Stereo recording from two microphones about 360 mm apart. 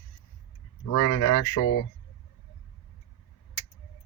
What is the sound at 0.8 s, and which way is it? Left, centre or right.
Speech, left.